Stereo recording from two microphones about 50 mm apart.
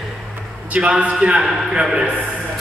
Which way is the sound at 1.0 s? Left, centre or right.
Right.